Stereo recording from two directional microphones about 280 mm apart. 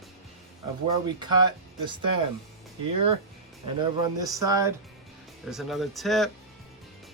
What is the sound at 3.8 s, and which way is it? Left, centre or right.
Speech, centre.